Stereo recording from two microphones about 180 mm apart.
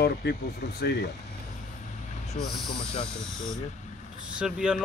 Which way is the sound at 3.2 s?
Centre (ahead or behind).